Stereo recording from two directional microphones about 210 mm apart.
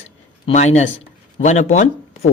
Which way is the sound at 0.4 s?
30° left (ahead or behind).